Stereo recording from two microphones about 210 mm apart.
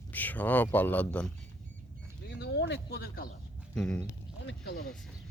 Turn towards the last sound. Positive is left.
turn(degrees=60)  # may be behind; listen again after turning